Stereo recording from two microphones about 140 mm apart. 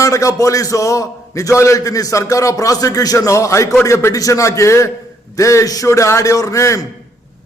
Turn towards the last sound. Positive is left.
turn(degrees=20)  # may be behind; listen again after turning